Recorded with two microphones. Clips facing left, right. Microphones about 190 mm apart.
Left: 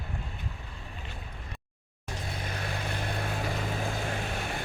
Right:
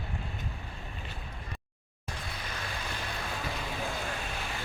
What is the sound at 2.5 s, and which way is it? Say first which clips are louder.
Vehicle: left 4 dB; 50° left (ahead or behind).